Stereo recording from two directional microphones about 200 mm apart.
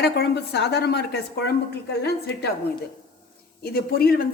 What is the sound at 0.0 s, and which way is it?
A woman's voice, 55° left (ahead or behind).